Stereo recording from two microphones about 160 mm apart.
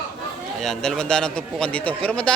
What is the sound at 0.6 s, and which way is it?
A man's voice, centre (ahead or behind).